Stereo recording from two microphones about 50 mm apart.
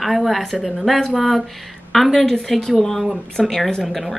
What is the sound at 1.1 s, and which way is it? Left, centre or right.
Speech, centre.